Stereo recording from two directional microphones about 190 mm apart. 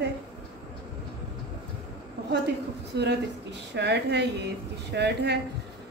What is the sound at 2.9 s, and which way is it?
A woman's voice, 65° right (ahead or behind).